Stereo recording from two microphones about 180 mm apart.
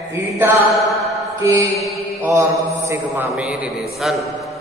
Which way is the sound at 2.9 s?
10° right (ahead or behind).